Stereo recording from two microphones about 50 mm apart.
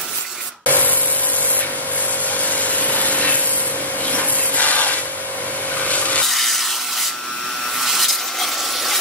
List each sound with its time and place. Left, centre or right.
0.7 s spray: left
2.3 s vacuum cleaner: left
4.1 s wood: left
6.2 s a sound: centre